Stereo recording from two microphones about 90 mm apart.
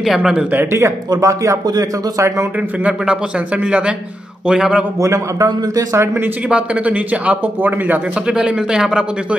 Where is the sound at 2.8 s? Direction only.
15° right (ahead or behind).